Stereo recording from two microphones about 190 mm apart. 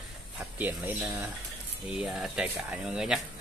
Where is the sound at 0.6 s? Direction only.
10° right (ahead or behind).